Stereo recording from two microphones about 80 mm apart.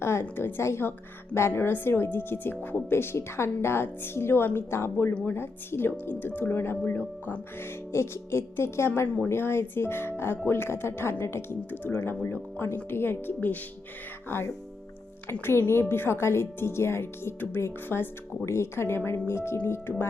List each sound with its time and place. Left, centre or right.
0.0 s a woman's voice: left
9.0 s a woman's voice: centre
9.3 s a woman's voice: left